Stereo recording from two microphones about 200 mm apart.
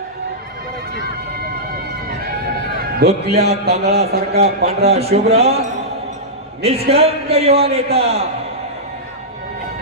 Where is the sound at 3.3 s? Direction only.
30° right (ahead or behind).